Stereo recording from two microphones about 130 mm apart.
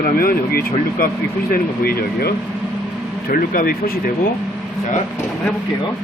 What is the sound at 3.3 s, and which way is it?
Speech, 90° left.